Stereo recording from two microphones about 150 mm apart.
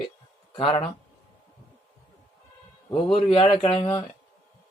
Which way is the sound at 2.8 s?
35° left (ahead or behind).